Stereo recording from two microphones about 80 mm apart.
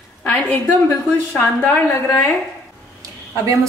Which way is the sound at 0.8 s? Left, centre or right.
Left.